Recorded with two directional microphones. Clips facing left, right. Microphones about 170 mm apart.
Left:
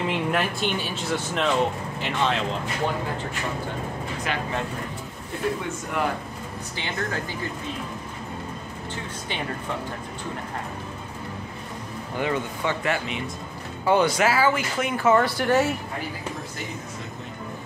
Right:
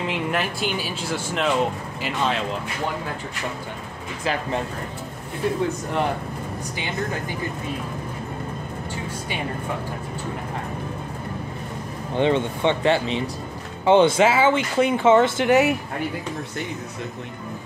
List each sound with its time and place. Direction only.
0.0 s speech: centre (ahead or behind)
5.6 s a man's voice: 30° right (ahead or behind)
12.2 s speech: 25° right (ahead or behind)